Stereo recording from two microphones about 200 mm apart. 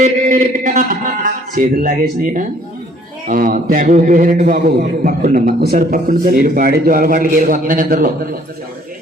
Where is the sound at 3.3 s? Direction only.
45° right (ahead or behind).